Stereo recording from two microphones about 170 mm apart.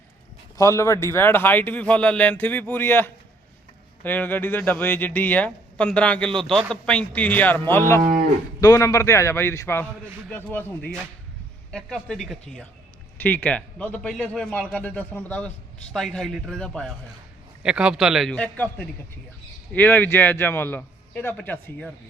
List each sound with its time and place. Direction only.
0.5 s a man's voice: 15° left (ahead or behind)
8.0 s cattle: 55° right (ahead or behind)
8.6 s a man's voice: 20° left (ahead or behind)